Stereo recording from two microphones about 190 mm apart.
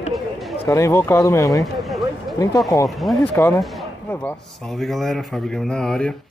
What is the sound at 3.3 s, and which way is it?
Speech, 10° left (ahead or behind).